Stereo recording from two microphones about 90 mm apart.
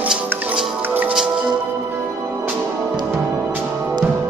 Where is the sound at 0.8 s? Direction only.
20° right (ahead or behind).